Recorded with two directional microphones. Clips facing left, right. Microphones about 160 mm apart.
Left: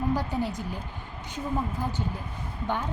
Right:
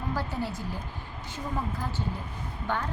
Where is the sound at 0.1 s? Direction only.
15° left (ahead or behind).